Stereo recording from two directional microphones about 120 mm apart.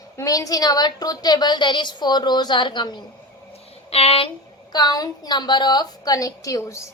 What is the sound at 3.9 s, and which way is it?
Speech, 55° left (ahead or behind).